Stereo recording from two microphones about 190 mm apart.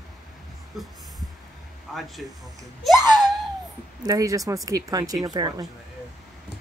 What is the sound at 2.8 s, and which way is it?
Speech, centre (ahead or behind).